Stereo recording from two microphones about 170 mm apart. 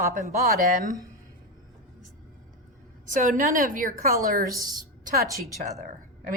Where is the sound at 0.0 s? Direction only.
50° right (ahead or behind).